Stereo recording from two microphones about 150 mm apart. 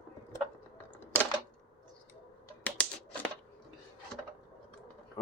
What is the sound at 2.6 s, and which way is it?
Typewriter, 10° left (ahead or behind).